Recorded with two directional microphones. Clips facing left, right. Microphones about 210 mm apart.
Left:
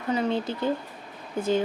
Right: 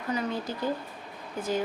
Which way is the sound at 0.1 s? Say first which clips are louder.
Left 5 dB; 25° left (ahead or behind).